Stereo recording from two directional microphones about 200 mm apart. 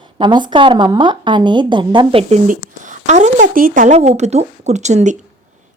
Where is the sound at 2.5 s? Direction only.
40° right (ahead or behind).